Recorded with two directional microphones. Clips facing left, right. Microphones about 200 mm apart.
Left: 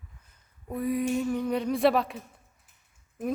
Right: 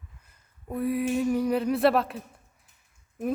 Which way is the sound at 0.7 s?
5° right (ahead or behind).